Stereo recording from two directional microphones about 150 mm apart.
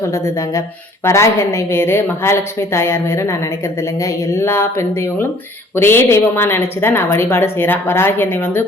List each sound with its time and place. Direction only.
0.0 s a woman's voice: 20° left (ahead or behind)